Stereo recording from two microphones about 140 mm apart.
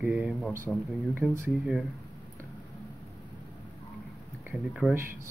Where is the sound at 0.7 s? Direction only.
5° left (ahead or behind).